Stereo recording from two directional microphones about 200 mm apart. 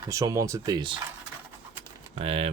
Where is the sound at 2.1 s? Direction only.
30° right (ahead or behind).